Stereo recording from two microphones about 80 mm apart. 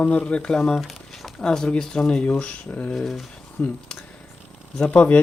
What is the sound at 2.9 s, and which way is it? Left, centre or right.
Speech, centre.